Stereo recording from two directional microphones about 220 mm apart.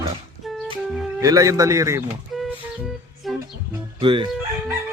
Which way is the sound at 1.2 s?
15° right (ahead or behind).